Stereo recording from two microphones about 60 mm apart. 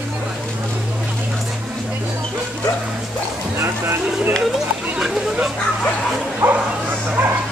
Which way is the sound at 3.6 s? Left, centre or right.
Right.